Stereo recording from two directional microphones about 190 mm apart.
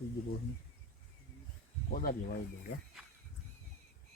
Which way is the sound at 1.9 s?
55° left (ahead or behind).